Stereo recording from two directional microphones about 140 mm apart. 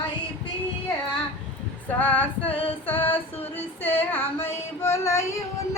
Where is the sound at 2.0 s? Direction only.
10° left (ahead or behind).